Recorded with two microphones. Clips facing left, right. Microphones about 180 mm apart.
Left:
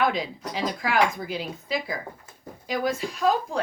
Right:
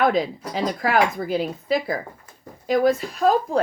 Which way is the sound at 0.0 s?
50° right (ahead or behind).